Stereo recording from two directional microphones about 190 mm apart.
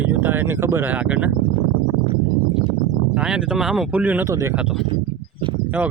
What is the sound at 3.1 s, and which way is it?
Speech, 5° right (ahead or behind).